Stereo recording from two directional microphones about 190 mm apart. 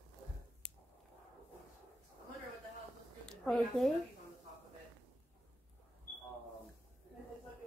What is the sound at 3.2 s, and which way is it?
Speech, 5° left (ahead or behind).